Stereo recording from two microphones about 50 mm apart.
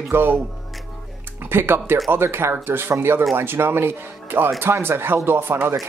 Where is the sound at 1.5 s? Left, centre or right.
Right.